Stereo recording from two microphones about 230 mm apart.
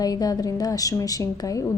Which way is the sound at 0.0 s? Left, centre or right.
Centre.